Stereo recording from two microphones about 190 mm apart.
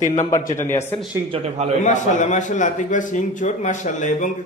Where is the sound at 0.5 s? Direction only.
15° left (ahead or behind).